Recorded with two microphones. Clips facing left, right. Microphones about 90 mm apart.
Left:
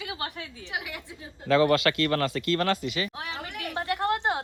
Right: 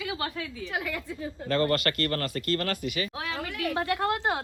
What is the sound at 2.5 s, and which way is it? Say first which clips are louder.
Speech: left 3 dB; 75° left (ahead or behind).